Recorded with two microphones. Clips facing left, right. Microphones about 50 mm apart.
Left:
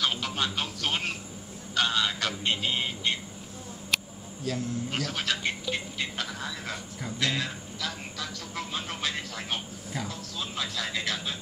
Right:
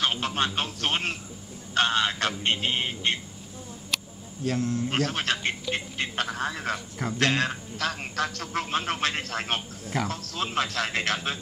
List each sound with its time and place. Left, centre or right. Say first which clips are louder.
0.0 s a sound: right 3 dB; right
0.6 s speech: right 3 dB; right
4.5 s speech: right 4 dB; right